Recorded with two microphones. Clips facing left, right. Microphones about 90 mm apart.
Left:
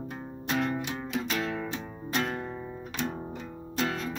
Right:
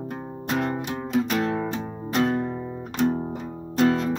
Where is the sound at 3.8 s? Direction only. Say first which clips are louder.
Right 10 dB; 45° right (ahead or behind).